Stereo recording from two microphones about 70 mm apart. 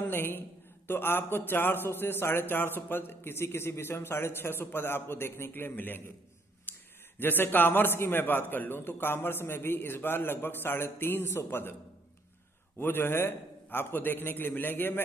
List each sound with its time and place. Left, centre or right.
0.0 s a man's voice: left
6.7 s a sound: left
7.2 s a man's voice: left
12.7 s a man's voice: left